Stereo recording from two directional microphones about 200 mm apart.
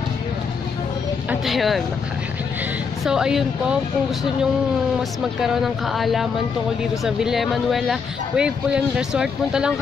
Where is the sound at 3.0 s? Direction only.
5° right (ahead or behind).